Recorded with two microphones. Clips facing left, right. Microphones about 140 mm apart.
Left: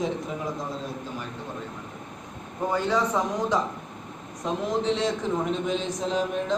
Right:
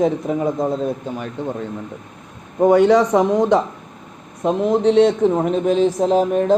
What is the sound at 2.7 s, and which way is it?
Speech, 70° right (ahead or behind).